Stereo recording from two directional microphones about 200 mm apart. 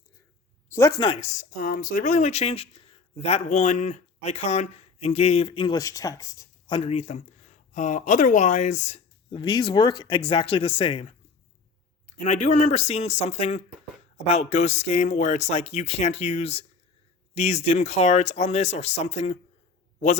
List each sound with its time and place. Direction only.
0.7 s speech: 15° left (ahead or behind); by 9.0 s 35° left (ahead or behind)
9.3 s speech: 20° left (ahead or behind)
12.2 s speech: 35° left (ahead or behind)